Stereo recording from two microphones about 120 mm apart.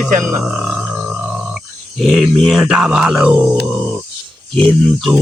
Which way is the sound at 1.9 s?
Centre (ahead or behind).